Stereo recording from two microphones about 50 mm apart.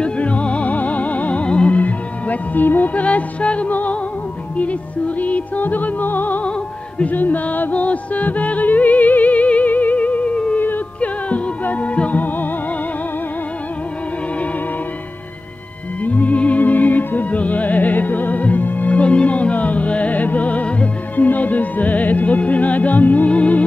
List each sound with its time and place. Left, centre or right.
0.0 s music: left
16.0 s music: left